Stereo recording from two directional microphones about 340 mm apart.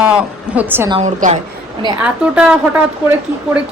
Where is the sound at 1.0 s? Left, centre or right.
Right.